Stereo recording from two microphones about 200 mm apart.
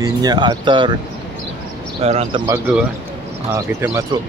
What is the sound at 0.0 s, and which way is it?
Speech, 20° right (ahead or behind).